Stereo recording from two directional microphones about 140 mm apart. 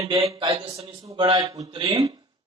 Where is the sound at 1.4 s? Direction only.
25° right (ahead or behind).